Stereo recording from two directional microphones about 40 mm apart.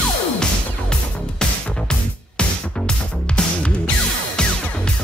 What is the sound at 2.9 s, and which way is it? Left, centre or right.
Music, left.